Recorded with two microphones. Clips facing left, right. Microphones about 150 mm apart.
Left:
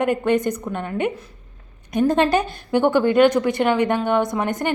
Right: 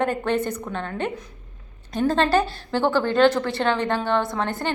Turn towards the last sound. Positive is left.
turn(degrees=15)  # may be behind; listen again after turning